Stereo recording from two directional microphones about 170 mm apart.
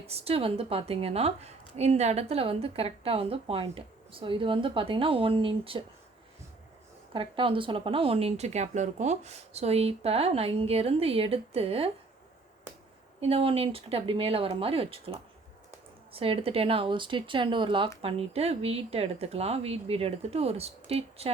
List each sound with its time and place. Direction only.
0.1 s a woman's voice: 35° right (ahead or behind)
7.1 s a woman's voice: 30° right (ahead or behind)
13.1 s a woman's voice: 35° right (ahead or behind)